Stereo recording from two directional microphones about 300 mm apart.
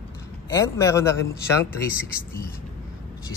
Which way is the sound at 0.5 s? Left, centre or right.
Centre.